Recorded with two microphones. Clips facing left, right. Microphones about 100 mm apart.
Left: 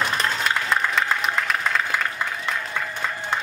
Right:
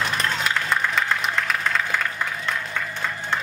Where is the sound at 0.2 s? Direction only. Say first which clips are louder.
Left 1 dB; centre (ahead or behind).